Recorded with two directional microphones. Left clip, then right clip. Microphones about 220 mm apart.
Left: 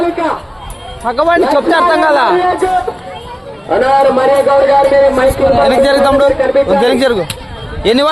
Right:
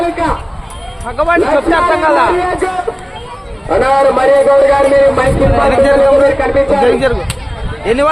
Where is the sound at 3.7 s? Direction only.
50° right (ahead or behind).